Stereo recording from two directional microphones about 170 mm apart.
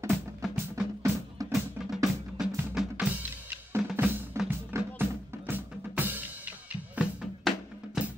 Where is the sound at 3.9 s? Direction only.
5° right (ahead or behind).